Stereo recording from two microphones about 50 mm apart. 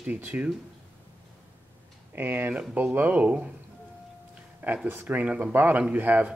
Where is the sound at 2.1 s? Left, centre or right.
Right.